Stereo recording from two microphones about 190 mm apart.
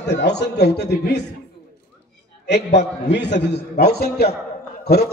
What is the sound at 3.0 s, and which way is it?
Speech, 65° left (ahead or behind).